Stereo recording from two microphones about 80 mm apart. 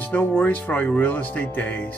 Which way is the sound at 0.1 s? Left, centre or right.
Centre.